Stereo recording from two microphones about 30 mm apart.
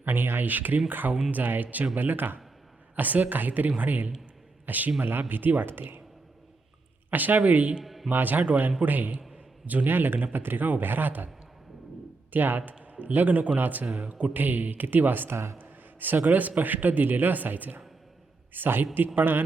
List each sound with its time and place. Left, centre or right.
0.1 s speech: right
0.9 s speech: right
2.0 s speech: right
2.9 s speech: right
3.8 s a man's voice: right
7.1 s speech: right
7.9 s a sound: centre
8.2 s speech: right
8.8 s speech: right
9.6 s speech: right
12.3 s speech: right
13.6 s speech: right
13.8 s speech: right